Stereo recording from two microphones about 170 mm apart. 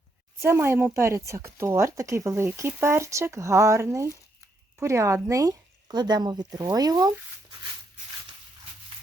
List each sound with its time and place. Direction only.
0.4 s speech: 15° right (ahead or behind)